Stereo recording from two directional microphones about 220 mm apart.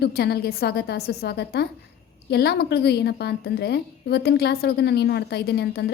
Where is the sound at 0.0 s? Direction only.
45° left (ahead or behind).